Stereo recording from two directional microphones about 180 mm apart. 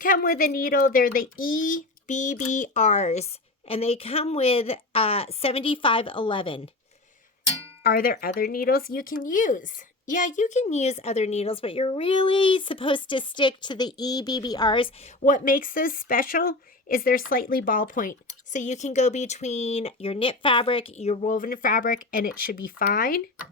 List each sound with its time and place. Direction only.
0.0 s speech: 50° left (ahead or behind); by 6.6 s 30° left (ahead or behind)
7.9 s speech: 55° left (ahead or behind); by 15.1 s 30° left (ahead or behind)
15.2 s speech: 50° left (ahead or behind)